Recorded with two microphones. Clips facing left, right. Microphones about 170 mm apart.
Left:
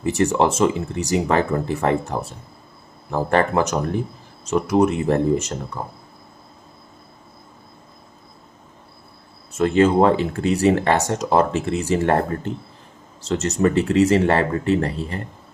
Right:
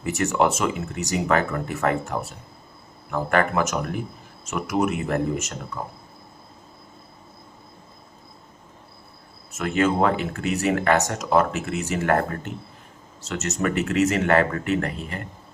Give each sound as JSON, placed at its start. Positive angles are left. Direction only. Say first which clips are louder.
{"t": 0.0, "sound": "speech", "louder": "left 3 dB", "side_deg": 30}
{"t": 9.5, "sound": "speech", "louder": "left 6 dB", "side_deg": 30}